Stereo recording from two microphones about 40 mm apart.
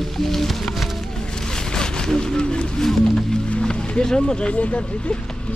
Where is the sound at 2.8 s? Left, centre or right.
Centre.